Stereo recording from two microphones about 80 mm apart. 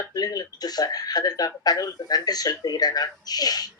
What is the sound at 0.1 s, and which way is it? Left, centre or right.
Speech, left.